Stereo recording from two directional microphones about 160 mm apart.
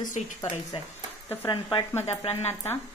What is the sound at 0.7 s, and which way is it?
Speech, 35° left (ahead or behind).